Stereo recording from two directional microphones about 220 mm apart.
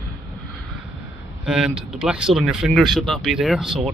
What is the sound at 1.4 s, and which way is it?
Speech, 5° right (ahead or behind).